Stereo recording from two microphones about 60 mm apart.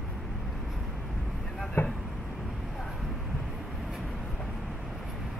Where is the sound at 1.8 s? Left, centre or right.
Left.